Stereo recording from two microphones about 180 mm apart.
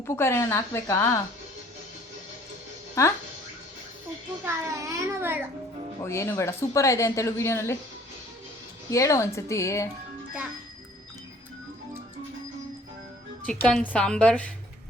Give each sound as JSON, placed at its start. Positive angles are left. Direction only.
{"t": 0.0, "sound": "a woman's voice", "side_deg": 15}
{"t": 3.0, "sound": "a woman's voice", "side_deg": 15}
{"t": 4.4, "sound": "a child's voice", "side_deg": -15}
{"t": 6.1, "sound": "a woman's voice", "side_deg": 15}
{"t": 8.9, "sound": "a woman's voice", "side_deg": 15}
{"t": 13.4, "sound": "a woman's voice", "side_deg": 5}